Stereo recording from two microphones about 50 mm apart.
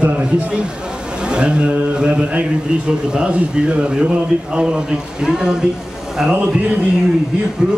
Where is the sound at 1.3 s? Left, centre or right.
Right.